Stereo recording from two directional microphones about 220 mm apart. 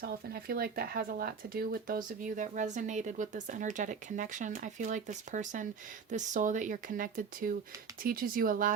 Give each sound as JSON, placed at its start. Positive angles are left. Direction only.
{"t": 0.0, "sound": "speech", "side_deg": -45}